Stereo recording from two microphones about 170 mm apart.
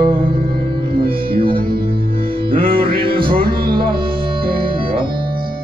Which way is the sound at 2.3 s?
30° right (ahead or behind).